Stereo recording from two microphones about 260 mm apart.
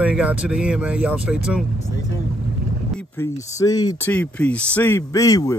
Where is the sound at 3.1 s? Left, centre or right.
Centre.